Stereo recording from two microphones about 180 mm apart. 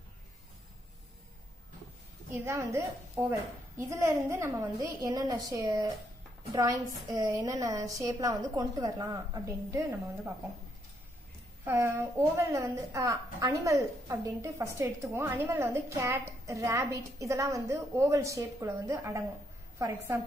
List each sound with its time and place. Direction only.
2.3 s a woman's voice: 15° right (ahead or behind)
11.6 s a woman's voice: 15° right (ahead or behind)